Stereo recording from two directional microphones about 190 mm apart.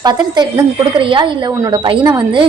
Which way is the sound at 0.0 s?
20° right (ahead or behind).